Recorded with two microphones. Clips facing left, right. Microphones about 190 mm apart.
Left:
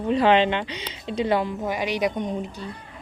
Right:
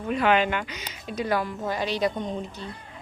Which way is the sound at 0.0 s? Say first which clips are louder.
Left 4 dB; 30° left (ahead or behind).